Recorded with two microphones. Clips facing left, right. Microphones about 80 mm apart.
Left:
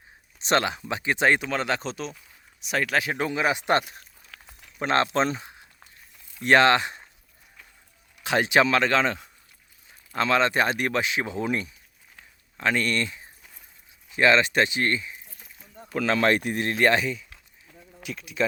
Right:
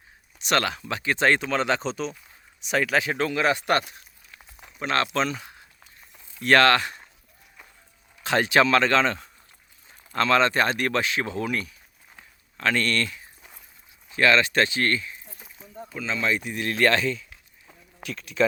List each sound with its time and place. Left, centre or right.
0.3 s a sound: left
0.6 s speech: centre
3.2 s speech: centre
4.3 s a sound: left
4.8 s speech: left
6.4 s speech: centre
8.2 s speech: centre
12.5 s speech: centre
14.2 s speech: left
15.9 s speech: left
16.7 s speech: centre